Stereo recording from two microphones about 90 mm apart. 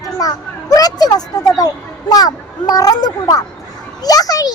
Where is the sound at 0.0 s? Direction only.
45° left (ahead or behind).